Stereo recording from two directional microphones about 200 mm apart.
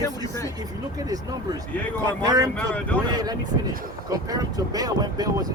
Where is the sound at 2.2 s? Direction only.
20° right (ahead or behind).